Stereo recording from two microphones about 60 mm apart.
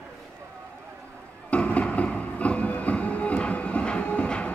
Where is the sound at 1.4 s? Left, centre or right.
Left.